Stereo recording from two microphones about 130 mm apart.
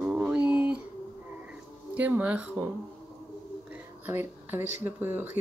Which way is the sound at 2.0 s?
10° right (ahead or behind).